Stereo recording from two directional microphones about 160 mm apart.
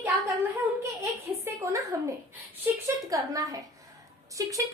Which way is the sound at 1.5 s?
15° right (ahead or behind).